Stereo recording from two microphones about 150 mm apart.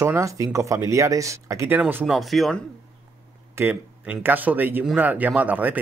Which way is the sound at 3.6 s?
15° right (ahead or behind).